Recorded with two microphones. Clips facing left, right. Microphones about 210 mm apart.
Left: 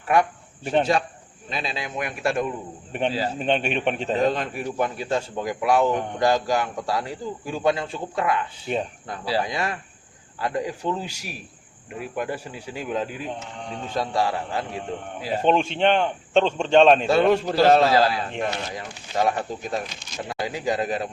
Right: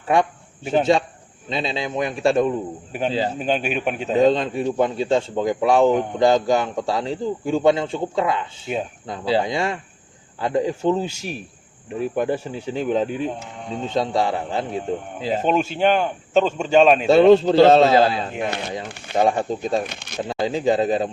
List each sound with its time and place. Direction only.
0.6 s a man's voice: 5° right (ahead or behind)
1.5 s a man's voice: 25° right (ahead or behind)
3.3 s a man's voice: 5° right (ahead or behind)
4.2 s a man's voice: 25° right (ahead or behind)
15.4 s a man's voice: 5° right (ahead or behind)
17.1 s a man's voice: 25° right (ahead or behind)
18.3 s a man's voice: 5° right (ahead or behind)
19.1 s a man's voice: 25° right (ahead or behind)
19.8 s speech: 60° right (ahead or behind)
20.2 s a man's voice: 25° right (ahead or behind)